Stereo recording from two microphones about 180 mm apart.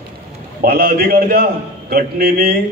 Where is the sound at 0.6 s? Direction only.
55° right (ahead or behind).